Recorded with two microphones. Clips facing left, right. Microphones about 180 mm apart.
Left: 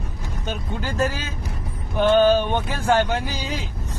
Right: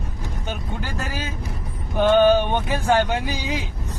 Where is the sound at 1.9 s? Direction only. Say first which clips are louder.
Right 1 dB; 15° right (ahead or behind).